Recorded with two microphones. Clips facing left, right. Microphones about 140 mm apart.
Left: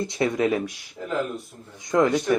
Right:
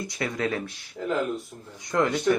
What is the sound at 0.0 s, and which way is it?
Speech, 25° left (ahead or behind).